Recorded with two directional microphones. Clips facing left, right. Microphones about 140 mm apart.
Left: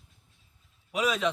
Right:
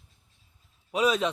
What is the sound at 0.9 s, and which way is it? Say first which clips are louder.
Speech: right 4 dB; 25° right (ahead or behind).